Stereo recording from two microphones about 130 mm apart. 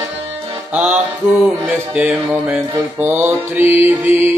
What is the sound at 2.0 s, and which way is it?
Mantra, 15° right (ahead or behind).